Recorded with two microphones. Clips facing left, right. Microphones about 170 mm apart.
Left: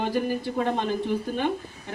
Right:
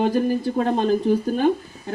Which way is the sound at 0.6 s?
35° right (ahead or behind).